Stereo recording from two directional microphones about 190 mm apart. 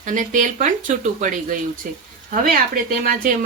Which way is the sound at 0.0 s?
40° right (ahead or behind).